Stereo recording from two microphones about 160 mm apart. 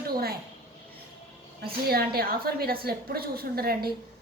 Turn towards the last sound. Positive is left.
turn(degrees=-75)  # may be behind; listen again after turning